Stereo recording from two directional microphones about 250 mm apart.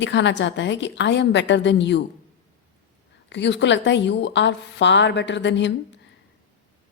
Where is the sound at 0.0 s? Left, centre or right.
Left.